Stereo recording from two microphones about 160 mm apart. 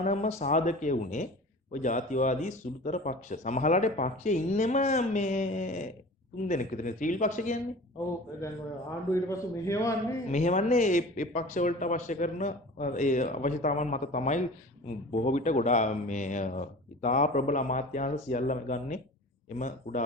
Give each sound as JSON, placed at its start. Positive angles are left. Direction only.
{"t": 0.0, "sound": "a man's voice", "side_deg": 45}
{"t": 9.0, "sound": "a man's voice", "side_deg": 15}
{"t": 10.3, "sound": "a man's voice", "side_deg": 50}